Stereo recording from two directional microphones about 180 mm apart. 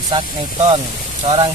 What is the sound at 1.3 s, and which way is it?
Speech, 25° right (ahead or behind).